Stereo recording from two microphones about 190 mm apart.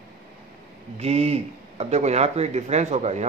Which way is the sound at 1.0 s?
35° right (ahead or behind).